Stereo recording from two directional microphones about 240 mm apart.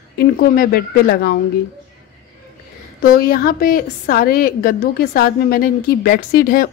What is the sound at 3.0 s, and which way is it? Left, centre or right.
A woman's voice, left.